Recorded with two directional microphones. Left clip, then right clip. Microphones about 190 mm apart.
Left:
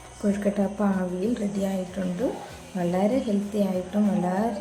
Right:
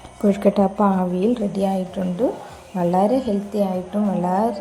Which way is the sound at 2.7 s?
15° right (ahead or behind).